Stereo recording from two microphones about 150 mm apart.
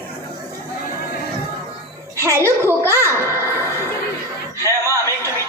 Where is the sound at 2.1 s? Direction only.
20° right (ahead or behind).